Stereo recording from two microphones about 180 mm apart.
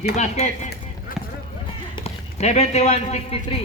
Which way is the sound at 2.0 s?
40° left (ahead or behind).